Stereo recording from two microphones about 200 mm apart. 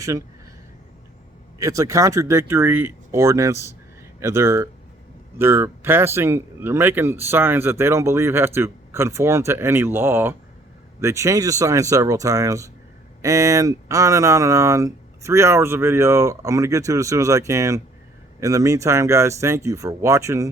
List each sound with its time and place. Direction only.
1.5 s speech: 15° right (ahead or behind)